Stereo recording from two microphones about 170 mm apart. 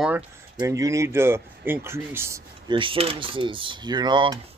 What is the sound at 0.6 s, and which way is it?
Speech, 20° right (ahead or behind).